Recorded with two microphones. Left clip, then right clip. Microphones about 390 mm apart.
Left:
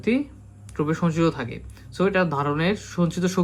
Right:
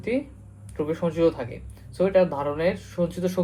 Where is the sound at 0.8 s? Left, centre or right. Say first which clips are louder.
Right 1 dB; left.